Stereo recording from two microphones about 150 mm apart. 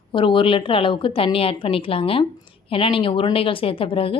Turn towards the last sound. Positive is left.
turn(degrees=40)  # may be behind; listen again after turning